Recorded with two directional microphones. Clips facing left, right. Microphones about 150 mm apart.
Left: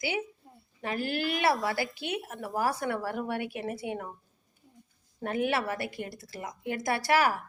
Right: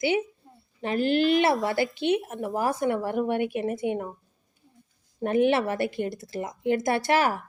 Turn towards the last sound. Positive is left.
turn(degrees=-25)  # may be behind; listen again after turning